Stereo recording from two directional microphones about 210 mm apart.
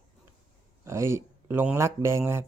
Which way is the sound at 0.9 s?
15° right (ahead or behind).